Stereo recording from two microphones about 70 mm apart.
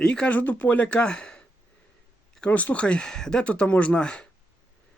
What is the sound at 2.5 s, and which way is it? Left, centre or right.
Speech, left.